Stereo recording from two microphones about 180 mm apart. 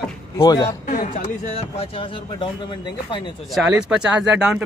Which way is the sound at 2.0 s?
30° left (ahead or behind).